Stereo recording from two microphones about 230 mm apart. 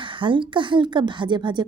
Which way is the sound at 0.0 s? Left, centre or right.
Right.